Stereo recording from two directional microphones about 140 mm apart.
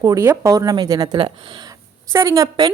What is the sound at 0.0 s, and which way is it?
A woman's voice, 20° right (ahead or behind).